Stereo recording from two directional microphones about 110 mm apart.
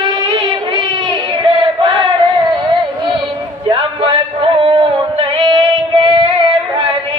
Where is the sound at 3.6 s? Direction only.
45° right (ahead or behind).